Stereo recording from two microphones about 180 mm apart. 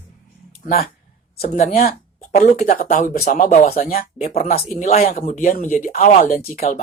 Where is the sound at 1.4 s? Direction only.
40° left (ahead or behind).